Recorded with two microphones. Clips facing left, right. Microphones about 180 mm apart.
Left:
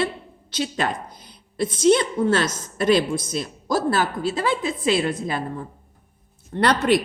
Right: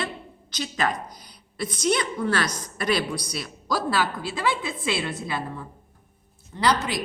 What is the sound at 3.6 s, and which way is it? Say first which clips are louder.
A man's voice: left 3 dB; 50° left (ahead or behind).